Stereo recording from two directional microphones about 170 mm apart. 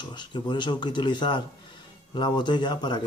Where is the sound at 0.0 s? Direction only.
25° left (ahead or behind).